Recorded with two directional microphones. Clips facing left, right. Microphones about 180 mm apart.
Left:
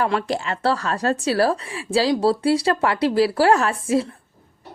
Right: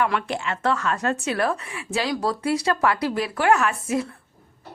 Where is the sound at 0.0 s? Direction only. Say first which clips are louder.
Left 2 dB; 35° left (ahead or behind).